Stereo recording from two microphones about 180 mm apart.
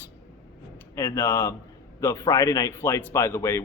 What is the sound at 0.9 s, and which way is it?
Speech, 15° left (ahead or behind).